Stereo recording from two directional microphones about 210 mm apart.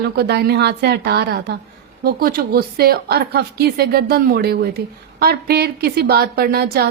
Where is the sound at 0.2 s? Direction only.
50° right (ahead or behind).